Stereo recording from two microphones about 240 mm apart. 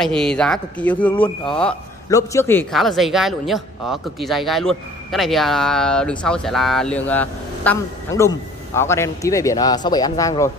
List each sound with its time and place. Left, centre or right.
0.0 s a man's voice: centre